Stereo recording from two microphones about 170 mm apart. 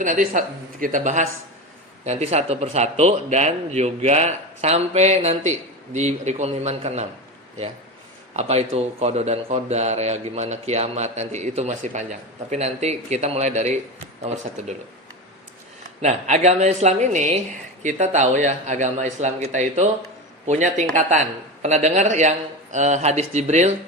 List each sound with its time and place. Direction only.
0.0 s a man's voice: 50° right (ahead or behind)
8.3 s speech: 40° right (ahead or behind)
16.0 s a man's voice: 40° right (ahead or behind)